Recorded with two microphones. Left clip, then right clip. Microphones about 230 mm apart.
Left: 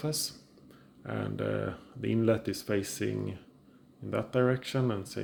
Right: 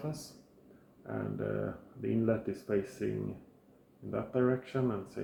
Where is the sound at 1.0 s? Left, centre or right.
Left.